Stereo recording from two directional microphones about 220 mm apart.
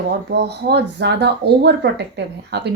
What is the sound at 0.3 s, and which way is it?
A woman's voice, 50° right (ahead or behind).